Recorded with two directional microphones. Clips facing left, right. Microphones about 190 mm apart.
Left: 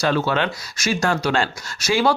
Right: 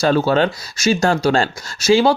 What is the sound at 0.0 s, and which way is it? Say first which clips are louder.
Speech: right 5 dB; 35° right (ahead or behind).